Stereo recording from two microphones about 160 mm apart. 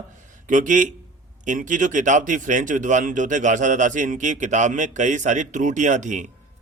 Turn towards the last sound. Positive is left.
turn(degrees=-50)  # may be behind; listen again after turning